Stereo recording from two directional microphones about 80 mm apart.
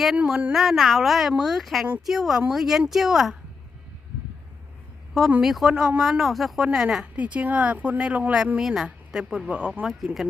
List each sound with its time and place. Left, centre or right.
0.2 s a woman's voice: centre
5.4 s a woman's voice: centre
8.6 s speech: centre